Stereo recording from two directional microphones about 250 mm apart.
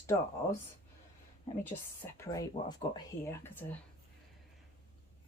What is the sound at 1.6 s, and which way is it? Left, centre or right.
Speech, centre.